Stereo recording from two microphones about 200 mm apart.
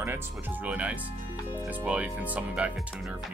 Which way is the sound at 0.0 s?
10° right (ahead or behind).